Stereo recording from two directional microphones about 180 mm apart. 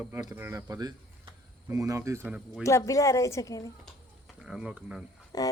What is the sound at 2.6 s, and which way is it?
Speech, 15° left (ahead or behind).